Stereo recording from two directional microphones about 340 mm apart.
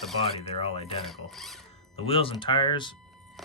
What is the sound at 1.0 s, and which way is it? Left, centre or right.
Speech, centre.